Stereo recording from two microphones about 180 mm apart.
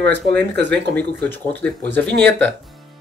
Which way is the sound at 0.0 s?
65° right (ahead or behind).